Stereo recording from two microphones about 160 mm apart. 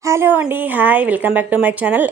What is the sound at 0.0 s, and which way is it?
A woman's voice, 15° right (ahead or behind).